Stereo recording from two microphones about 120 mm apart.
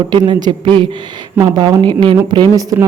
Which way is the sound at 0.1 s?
35° right (ahead or behind).